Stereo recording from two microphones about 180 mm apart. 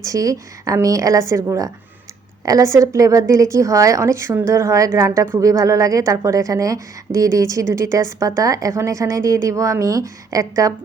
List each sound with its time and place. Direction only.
0.0 s a woman's voice: 20° right (ahead or behind)